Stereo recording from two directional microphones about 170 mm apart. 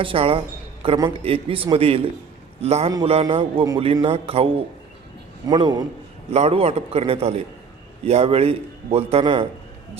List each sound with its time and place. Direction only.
0.0 s a man's voice: 35° right (ahead or behind)
5.5 s a man's voice: 25° right (ahead or behind)
6.3 s a man's voice: 40° right (ahead or behind)